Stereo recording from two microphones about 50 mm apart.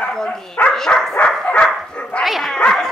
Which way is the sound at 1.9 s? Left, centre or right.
Left.